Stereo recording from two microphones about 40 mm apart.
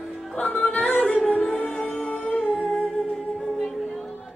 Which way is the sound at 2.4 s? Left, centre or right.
Centre.